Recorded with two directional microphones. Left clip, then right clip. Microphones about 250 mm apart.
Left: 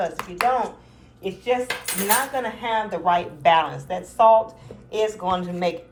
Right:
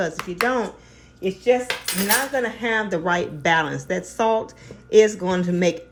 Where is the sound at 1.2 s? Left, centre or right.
Right.